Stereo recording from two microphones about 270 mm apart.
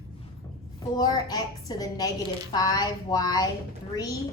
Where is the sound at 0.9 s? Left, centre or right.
Centre.